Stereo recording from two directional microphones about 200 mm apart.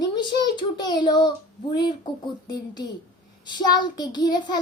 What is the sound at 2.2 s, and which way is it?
A child's voice, 20° left (ahead or behind).